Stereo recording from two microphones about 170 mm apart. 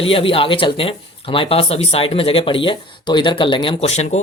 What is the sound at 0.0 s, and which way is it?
Speech, 35° left (ahead or behind).